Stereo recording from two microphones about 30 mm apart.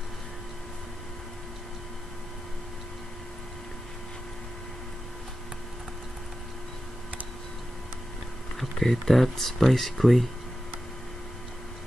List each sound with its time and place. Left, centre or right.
8.7 s speech: centre